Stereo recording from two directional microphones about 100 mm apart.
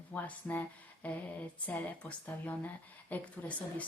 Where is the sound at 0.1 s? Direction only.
15° left (ahead or behind).